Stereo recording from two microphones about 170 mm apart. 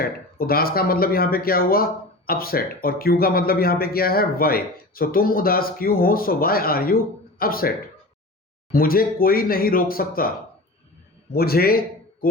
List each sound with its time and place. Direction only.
0.0 s speech: 60° left (ahead or behind)
8.7 s a man's voice: 60° left (ahead or behind)